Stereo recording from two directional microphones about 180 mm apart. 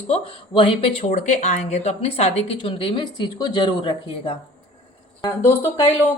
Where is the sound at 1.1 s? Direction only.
45° left (ahead or behind); by 4.3 s 30° left (ahead or behind).